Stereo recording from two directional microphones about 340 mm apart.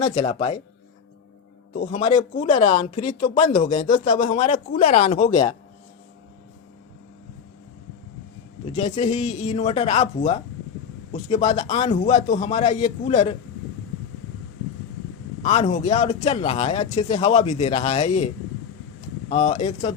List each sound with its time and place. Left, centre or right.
0.0 s speech: centre
1.7 s speech: left
8.6 s speech: centre
15.4 s speech: centre
19.3 s speech: centre